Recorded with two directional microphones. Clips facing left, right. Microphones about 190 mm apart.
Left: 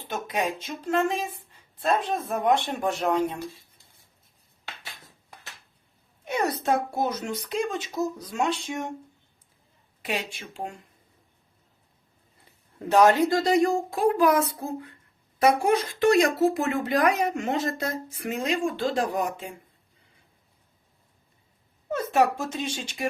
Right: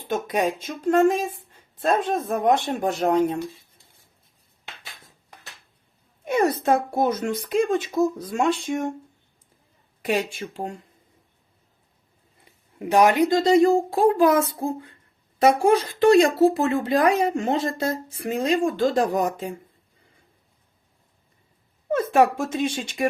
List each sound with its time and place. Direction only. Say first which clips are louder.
0.1 s speech: right 5 dB; 45° right (ahead or behind)
6.2 s speech: right 5 dB; 50° right (ahead or behind)
10.0 s speech: right 7 dB; 45° right (ahead or behind)
12.8 s a woman's voice: right 1 dB; 15° right (ahead or behind); by 19.5 s 40° right (ahead or behind)
21.8 s speech: right 4 dB; 55° right (ahead or behind)